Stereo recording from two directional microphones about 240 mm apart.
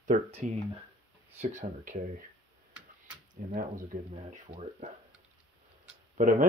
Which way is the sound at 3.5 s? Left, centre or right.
Right.